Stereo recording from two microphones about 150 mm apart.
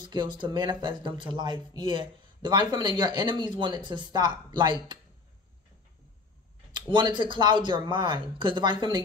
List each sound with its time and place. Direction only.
0.0 s speech: 30° right (ahead or behind)
6.7 s speech: 30° right (ahead or behind)